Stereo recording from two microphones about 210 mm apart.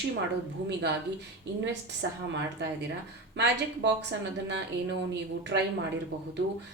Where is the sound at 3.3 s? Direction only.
55° right (ahead or behind).